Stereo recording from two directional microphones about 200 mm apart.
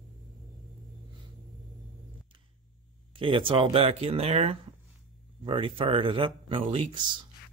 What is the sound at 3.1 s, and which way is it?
Speech, 25° right (ahead or behind).